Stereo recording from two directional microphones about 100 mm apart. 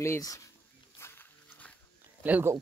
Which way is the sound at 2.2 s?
20° right (ahead or behind).